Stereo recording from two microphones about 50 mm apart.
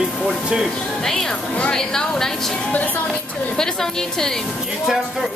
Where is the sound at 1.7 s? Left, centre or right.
Centre.